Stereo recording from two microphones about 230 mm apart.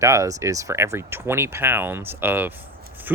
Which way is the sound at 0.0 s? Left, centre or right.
Centre.